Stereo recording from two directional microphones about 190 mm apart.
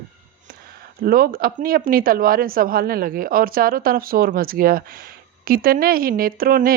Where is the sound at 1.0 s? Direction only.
50° right (ahead or behind).